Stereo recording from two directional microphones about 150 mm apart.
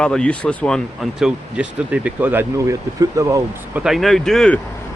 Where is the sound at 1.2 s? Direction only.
10° right (ahead or behind).